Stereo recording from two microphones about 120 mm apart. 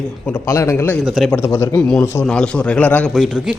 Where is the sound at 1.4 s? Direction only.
20° left (ahead or behind).